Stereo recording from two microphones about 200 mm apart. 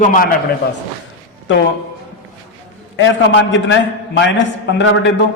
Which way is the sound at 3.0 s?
70° left (ahead or behind).